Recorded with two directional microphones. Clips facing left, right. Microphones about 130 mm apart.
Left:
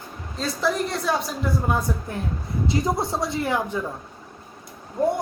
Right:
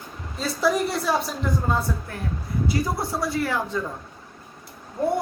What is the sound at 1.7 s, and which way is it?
Speech, 15° left (ahead or behind).